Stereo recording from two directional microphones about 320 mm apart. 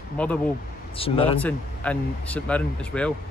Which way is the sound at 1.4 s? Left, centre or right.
Centre.